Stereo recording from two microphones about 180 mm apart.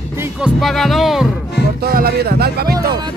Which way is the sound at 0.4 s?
Centre (ahead or behind).